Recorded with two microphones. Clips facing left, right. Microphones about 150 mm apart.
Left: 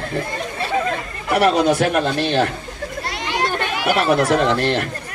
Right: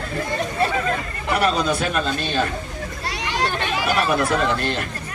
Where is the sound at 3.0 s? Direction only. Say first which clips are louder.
Left 1 dB; 55° left (ahead or behind).